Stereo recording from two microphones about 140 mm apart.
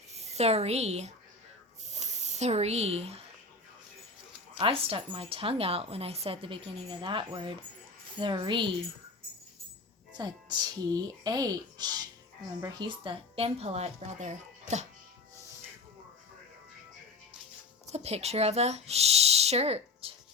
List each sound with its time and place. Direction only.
0.1 s a woman's voice: 50° right (ahead or behind)
1.9 s spray: 55° right (ahead or behind)
4.5 s a woman's voice: 40° right (ahead or behind)
10.1 s a woman's voice: 30° right (ahead or behind); by 14.8 s 55° right (ahead or behind)
17.8 s speech: 50° right (ahead or behind)